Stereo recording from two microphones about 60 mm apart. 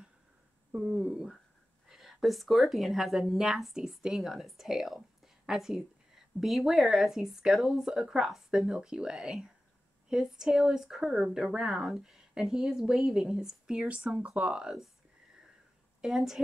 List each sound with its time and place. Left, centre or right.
0.7 s speech: right
1.1 s speech: centre
16.0 s speech: centre